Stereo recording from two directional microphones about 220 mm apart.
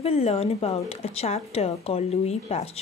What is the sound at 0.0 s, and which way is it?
Speech, 25° left (ahead or behind).